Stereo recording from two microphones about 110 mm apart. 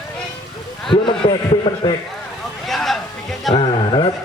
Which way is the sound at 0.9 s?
50° left (ahead or behind).